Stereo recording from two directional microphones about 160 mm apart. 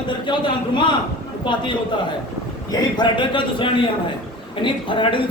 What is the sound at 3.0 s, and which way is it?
Speech, 30° left (ahead or behind).